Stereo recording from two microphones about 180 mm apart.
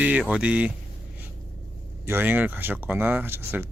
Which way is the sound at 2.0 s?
10° right (ahead or behind).